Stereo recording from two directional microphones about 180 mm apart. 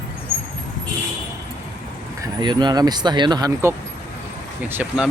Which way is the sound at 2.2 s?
25° right (ahead or behind).